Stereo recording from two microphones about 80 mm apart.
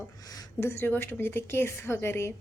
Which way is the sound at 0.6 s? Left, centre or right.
Left.